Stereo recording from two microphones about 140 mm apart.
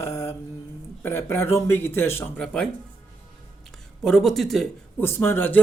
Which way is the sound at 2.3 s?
5° left (ahead or behind).